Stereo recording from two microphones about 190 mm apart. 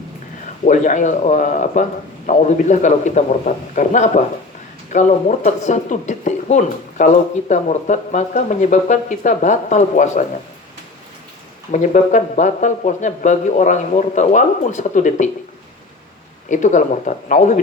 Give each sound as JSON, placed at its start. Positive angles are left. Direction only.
{"t": 0.6, "sound": "speech", "side_deg": 40}
{"t": 11.7, "sound": "speech", "side_deg": 40}
{"t": 16.5, "sound": "speech", "side_deg": 40}